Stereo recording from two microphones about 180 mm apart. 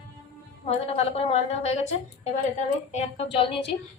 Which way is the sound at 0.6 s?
35° left (ahead or behind).